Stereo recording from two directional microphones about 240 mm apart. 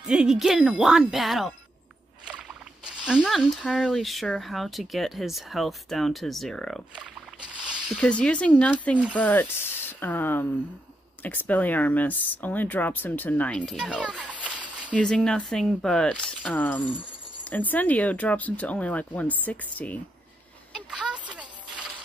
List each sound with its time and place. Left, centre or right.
0.0 s speech: centre
2.2 s rowboat: centre
3.1 s speech: centre
7.6 s zipper: centre
8.0 s speech: centre
20.7 s a sound: centre